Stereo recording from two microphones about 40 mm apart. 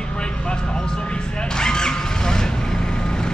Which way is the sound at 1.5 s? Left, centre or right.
Centre.